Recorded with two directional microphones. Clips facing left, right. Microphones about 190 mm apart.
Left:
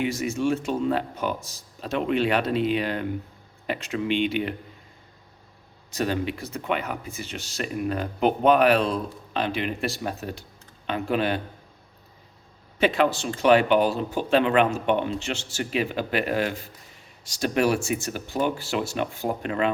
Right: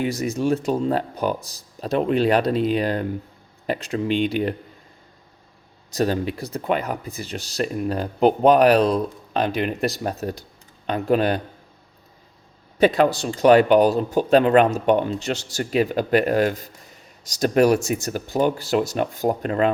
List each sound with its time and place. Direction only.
0.0 s speech: 35° right (ahead or behind)
5.9 s speech: 40° right (ahead or behind)
12.8 s speech: 40° right (ahead or behind)